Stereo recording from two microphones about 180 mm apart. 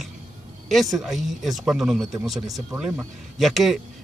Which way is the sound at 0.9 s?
Centre (ahead or behind).